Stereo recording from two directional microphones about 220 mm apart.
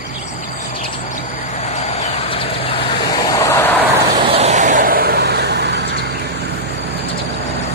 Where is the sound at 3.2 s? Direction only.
15° left (ahead or behind).